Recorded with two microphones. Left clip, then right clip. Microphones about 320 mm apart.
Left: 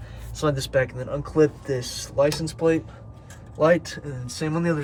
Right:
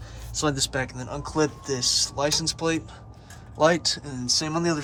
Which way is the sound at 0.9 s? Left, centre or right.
Centre.